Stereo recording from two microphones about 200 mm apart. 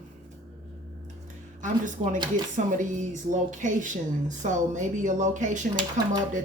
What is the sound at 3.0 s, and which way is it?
Speech, 40° right (ahead or behind).